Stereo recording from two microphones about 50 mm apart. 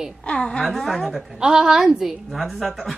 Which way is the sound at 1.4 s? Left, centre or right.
Centre.